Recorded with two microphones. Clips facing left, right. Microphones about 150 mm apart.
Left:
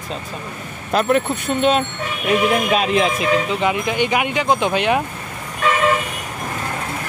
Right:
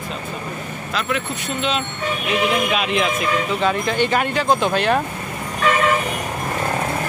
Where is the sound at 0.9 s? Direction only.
45° left (ahead or behind).